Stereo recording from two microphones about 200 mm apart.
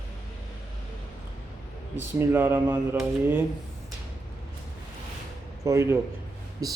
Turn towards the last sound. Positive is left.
turn(degrees=-15)  # may be behind; listen again after turning